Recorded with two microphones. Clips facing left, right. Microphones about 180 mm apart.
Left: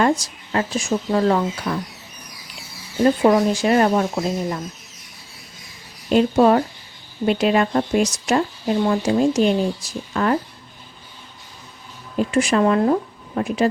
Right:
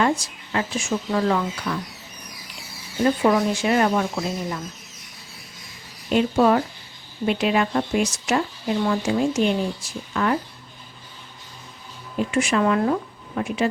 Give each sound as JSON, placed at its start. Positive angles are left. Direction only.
{"t": 0.0, "sound": "speech", "side_deg": 40}
{"t": 3.0, "sound": "speech", "side_deg": 35}
{"t": 6.1, "sound": "speech", "side_deg": 35}
{"t": 12.3, "sound": "speech", "side_deg": 35}